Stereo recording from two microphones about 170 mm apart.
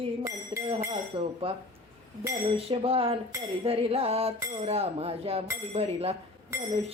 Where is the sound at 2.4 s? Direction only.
35° right (ahead or behind).